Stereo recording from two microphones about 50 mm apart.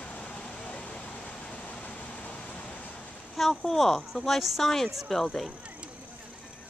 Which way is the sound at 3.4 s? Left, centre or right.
Centre.